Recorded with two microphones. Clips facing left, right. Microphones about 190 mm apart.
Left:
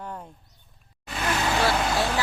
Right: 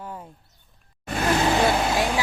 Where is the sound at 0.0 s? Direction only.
5° right (ahead or behind).